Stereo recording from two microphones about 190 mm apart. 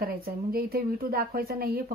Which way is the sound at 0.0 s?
50° right (ahead or behind).